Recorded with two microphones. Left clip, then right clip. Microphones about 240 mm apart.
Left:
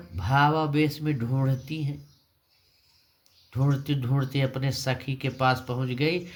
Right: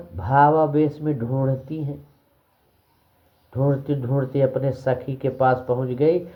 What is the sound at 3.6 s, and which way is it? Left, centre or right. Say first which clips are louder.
Speech: right 7 dB; left.